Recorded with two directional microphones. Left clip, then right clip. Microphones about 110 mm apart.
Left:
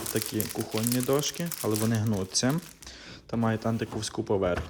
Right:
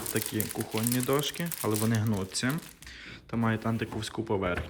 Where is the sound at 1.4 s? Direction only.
5° left (ahead or behind).